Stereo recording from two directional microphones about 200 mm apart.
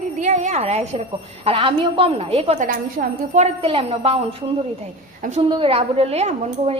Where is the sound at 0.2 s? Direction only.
35° right (ahead or behind).